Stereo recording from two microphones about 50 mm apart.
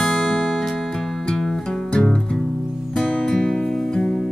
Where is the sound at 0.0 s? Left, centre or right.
Centre.